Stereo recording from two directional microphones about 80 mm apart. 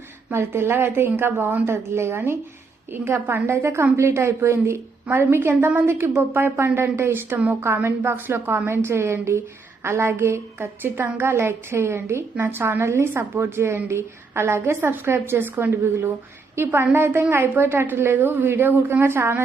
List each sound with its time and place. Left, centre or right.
0.3 s a woman's voice: right